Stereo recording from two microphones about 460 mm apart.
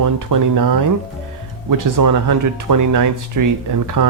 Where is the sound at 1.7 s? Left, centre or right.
Right.